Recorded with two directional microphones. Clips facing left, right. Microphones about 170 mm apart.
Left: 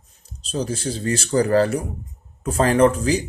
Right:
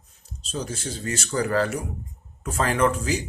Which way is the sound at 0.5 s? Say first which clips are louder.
Left 6 dB; 35° left (ahead or behind).